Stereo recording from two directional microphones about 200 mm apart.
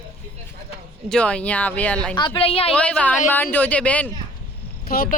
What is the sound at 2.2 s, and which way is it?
Speech, 25° left (ahead or behind).